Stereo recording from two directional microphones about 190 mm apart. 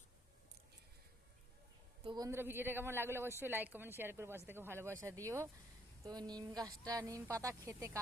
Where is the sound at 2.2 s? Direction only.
10° right (ahead or behind).